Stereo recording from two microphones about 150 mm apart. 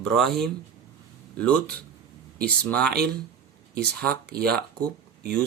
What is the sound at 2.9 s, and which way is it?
Speech, 90° right.